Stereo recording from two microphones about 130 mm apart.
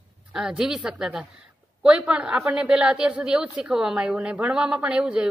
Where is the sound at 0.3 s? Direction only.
5° right (ahead or behind).